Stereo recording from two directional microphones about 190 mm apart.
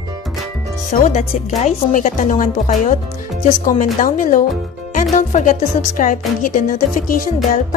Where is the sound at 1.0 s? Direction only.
40° left (ahead or behind).